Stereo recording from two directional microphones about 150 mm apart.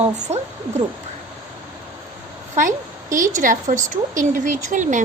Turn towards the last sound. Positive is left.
turn(degrees=-55)  # may be behind; listen again after turning